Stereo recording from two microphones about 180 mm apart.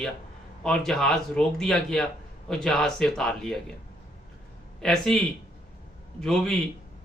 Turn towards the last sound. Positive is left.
turn(degrees=5)  # may be behind; listen again after turning